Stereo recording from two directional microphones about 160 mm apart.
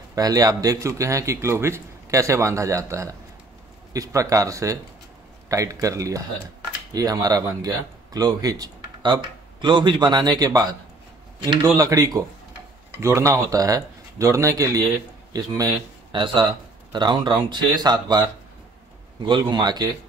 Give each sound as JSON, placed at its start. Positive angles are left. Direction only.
{"t": 0.1, "sound": "a man's voice", "side_deg": -25}
{"t": 19.2, "sound": "a man's voice", "side_deg": -30}